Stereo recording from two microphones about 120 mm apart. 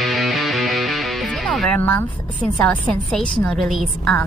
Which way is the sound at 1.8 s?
15° left (ahead or behind).